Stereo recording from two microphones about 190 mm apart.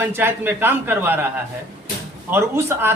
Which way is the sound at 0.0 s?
10° right (ahead or behind).